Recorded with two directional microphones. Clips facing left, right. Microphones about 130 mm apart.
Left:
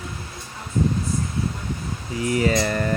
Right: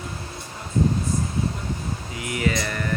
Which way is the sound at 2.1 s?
35° left (ahead or behind).